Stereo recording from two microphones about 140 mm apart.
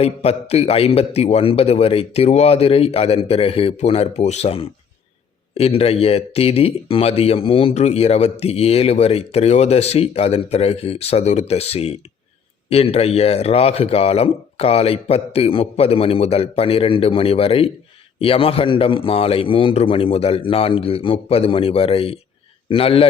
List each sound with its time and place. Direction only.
0.0 s a man's voice: 45° left (ahead or behind)